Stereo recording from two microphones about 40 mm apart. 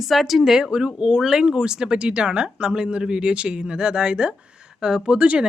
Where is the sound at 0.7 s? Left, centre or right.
Right.